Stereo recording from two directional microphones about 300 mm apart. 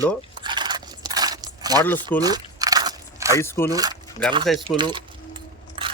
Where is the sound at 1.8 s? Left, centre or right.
Centre.